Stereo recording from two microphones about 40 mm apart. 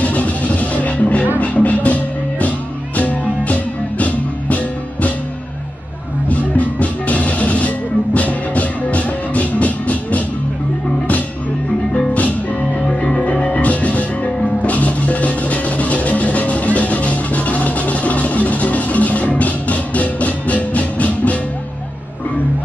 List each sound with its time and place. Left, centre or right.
0.0 s music: left
6.2 s music: left
12.1 s music: left